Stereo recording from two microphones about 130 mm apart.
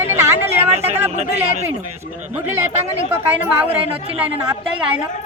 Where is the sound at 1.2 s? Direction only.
60° right (ahead or behind).